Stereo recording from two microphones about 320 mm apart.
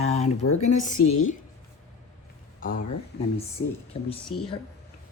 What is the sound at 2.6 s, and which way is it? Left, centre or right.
Speech, left.